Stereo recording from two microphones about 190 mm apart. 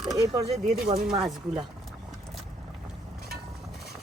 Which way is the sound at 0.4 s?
35° right (ahead or behind).